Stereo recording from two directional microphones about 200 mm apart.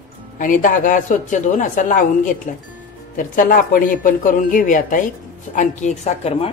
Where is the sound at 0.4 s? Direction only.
40° left (ahead or behind).